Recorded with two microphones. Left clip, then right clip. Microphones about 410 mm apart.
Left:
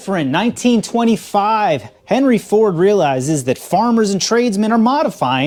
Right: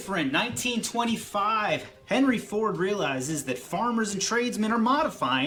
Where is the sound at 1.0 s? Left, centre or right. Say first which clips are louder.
Left 10 dB; left.